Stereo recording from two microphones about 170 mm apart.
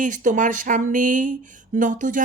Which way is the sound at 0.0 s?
50° right (ahead or behind).